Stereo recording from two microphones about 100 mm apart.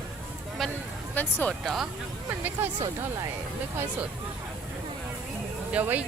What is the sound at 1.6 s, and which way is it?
Speech, centre (ahead or behind).